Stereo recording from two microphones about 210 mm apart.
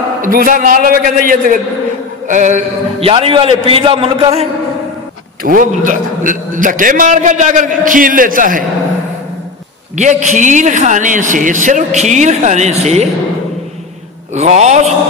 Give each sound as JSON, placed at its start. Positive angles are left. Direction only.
{"t": 0.2, "sound": "a man's voice", "side_deg": -40}
{"t": 5.4, "sound": "a man's voice", "side_deg": -40}
{"t": 9.9, "sound": "a man's voice", "side_deg": -35}
{"t": 14.3, "sound": "a man's voice", "side_deg": -35}